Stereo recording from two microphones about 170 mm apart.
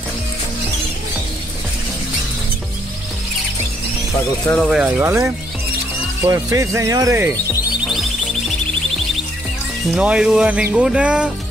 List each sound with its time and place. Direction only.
4.6 s speech: 5° right (ahead or behind)
9.9 s speech: 5° right (ahead or behind)